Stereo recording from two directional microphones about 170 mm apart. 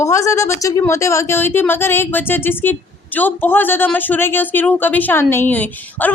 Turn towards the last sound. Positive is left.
turn(degrees=10)  # may be behind; listen again after turning